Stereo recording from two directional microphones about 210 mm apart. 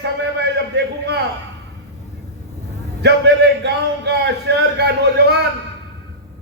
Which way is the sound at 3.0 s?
55° right (ahead or behind).